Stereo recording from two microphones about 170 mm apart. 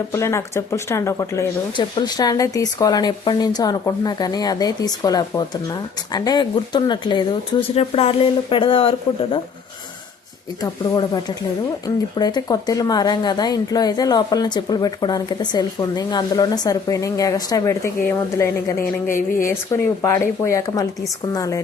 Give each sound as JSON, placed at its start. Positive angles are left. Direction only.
{"t": 0.1, "sound": "speech", "side_deg": 15}
{"t": 10.6, "sound": "speech", "side_deg": 25}
{"t": 19.0, "sound": "speech", "side_deg": 50}
{"t": 19.5, "sound": "speech", "side_deg": 15}